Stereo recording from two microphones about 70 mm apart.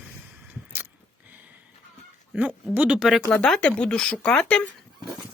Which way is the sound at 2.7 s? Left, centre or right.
Centre.